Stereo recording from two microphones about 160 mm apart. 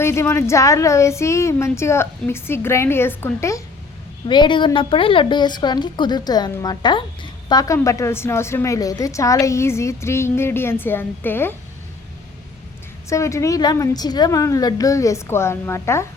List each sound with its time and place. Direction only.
0.0 s a woman's voice: 15° left (ahead or behind)
4.3 s a woman's voice: 30° left (ahead or behind); by 11.5 s 15° left (ahead or behind)
13.1 s a woman's voice: 20° left (ahead or behind)